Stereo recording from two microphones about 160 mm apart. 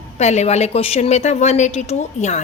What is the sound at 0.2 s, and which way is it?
A woman's voice, 45° left (ahead or behind).